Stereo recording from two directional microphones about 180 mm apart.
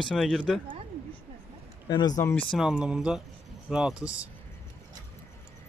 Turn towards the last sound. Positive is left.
turn(degrees=-5)  # may be behind; listen again after turning